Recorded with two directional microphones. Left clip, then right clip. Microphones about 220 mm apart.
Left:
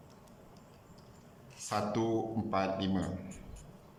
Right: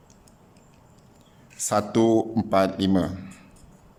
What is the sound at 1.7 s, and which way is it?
Speech, 55° right (ahead or behind).